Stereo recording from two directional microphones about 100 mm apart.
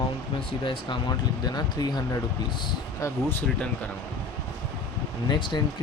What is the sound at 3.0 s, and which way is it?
Speech, 20° left (ahead or behind).